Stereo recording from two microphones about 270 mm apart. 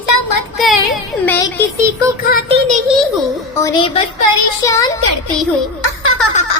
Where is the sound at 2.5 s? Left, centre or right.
Right.